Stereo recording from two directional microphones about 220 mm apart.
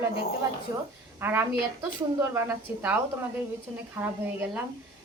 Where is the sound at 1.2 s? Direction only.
10° right (ahead or behind).